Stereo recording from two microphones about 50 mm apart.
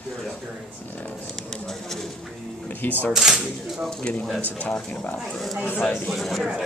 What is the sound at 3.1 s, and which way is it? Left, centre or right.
Speech, centre.